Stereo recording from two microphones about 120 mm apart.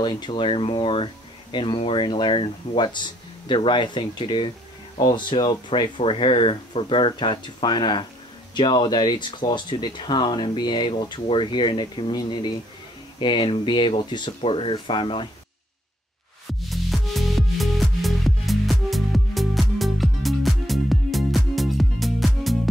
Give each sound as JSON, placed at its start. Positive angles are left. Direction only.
{"t": 0.0, "sound": "speech", "side_deg": 40}
{"t": 16.6, "sound": "music", "side_deg": 0}